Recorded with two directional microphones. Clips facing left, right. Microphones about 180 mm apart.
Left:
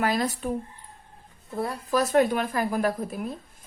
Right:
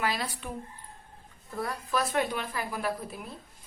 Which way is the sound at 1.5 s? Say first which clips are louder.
Left 4 dB; 25° left (ahead or behind).